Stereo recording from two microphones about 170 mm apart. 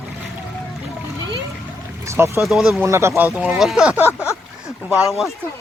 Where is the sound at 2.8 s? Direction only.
15° right (ahead or behind).